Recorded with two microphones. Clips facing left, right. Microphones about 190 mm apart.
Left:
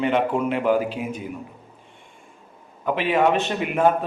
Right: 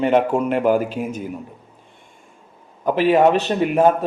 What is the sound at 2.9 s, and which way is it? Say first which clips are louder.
A man's voice: right 5 dB; 40° right (ahead or behind).